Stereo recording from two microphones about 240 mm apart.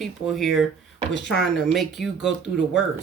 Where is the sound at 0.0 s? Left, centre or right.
Centre.